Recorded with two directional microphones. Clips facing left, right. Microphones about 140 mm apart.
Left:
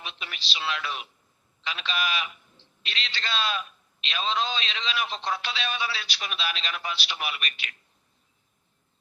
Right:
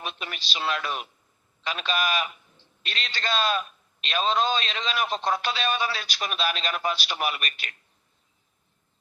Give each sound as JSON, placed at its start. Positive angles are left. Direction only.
{"t": 0.0, "sound": "a man's voice", "side_deg": -45}